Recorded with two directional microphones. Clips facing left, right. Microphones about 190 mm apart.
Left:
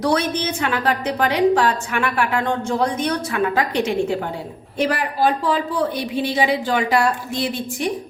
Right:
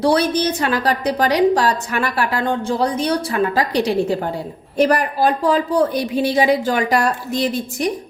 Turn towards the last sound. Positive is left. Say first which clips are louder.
# right 3 dB
turn(degrees=-40)  # may be behind; listen again after turning